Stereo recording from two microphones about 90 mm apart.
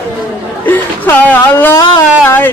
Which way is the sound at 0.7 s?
20° left (ahead or behind).